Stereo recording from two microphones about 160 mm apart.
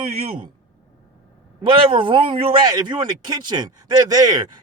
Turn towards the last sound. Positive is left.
turn(degrees=-25)  # may be behind; listen again after turning